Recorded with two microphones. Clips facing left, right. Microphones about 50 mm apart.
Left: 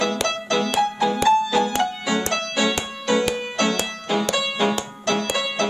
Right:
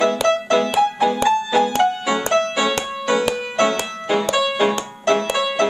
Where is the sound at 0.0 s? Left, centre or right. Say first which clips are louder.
Right 6 dB; centre.